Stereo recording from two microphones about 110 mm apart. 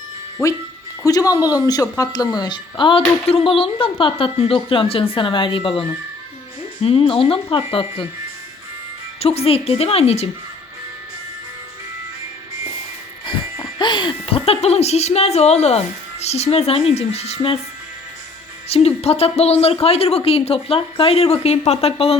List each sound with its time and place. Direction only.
1.0 s speech: 35° left (ahead or behind)
3.2 s speech: 60° left (ahead or behind)
6.8 s speech: 55° left (ahead or behind)
9.2 s speech: 65° left (ahead or behind)
13.2 s music: 45° left (ahead or behind); by 15.8 s 75° left (ahead or behind)
16.2 s speech: 75° left (ahead or behind)
18.7 s a woman's voice: 70° left (ahead or behind)